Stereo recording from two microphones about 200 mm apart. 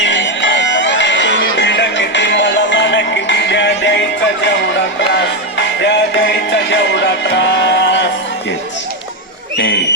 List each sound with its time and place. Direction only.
0.0 s music: 65° left (ahead or behind)
5.8 s music: 60° left (ahead or behind)
9.6 s speech: 60° left (ahead or behind)